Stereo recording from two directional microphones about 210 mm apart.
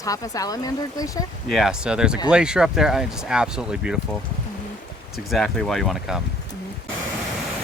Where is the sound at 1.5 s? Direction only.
Centre (ahead or behind).